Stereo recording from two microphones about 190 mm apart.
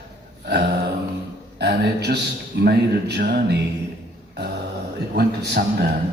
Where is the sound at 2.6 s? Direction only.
60° right (ahead or behind).